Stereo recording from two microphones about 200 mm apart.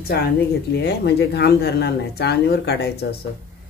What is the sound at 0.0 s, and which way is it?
Speech, 50° left (ahead or behind).